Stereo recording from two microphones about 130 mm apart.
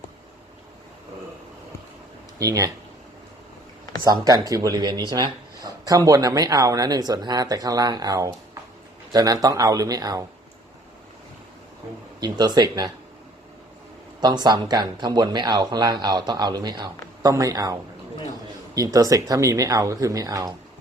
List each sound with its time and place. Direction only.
2.4 s speech: 25° right (ahead or behind)
4.0 s speech: 25° right (ahead or behind)
12.2 s speech: 30° right (ahead or behind)
14.2 s speech: 30° right (ahead or behind)